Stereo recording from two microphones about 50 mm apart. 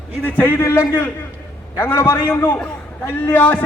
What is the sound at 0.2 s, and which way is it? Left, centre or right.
Speech, left.